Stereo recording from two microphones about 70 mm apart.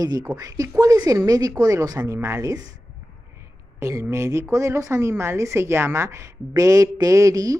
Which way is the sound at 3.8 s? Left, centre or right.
Right.